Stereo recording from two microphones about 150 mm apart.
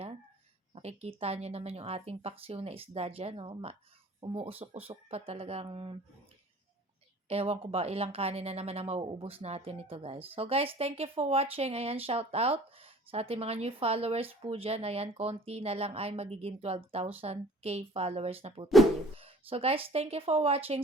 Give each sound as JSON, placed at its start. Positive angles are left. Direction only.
{"t": 0.7, "sound": "speech", "side_deg": -45}
{"t": 7.3, "sound": "speech", "side_deg": -40}